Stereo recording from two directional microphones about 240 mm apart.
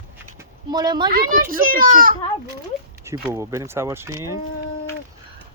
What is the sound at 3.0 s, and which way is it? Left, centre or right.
Speech, centre.